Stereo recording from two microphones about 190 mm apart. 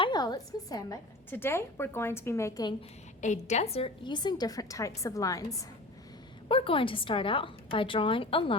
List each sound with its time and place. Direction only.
0.0 s a woman's voice: 20° left (ahead or behind)
3.2 s a woman's voice: 40° left (ahead or behind); by 5.6 s 15° left (ahead or behind)
6.5 s a woman's voice: 30° left (ahead or behind)